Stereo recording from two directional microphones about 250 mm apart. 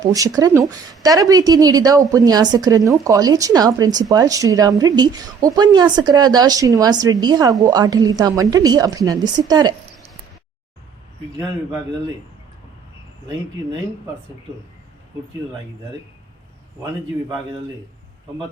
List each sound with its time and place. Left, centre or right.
0.0 s a woman's voice: centre